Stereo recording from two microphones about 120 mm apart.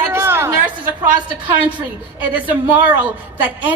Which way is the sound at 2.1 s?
15° right (ahead or behind).